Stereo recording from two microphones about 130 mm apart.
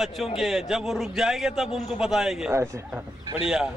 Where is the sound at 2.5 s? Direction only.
20° right (ahead or behind).